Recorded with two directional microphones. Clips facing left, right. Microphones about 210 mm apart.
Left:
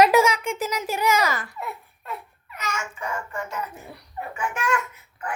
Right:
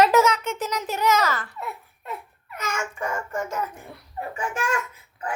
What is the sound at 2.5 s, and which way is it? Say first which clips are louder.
A child's voice: right 2 dB; 50° right (ahead or behind).